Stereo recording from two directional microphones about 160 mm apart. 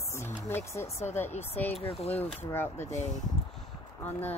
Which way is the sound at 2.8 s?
45° left (ahead or behind).